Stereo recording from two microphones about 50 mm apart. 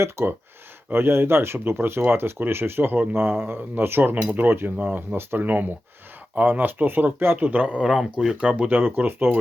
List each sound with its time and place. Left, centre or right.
0.2 s speech: right
0.9 s speech: right
7.6 s speech: centre
8.4 s speech: right
8.7 s speech: right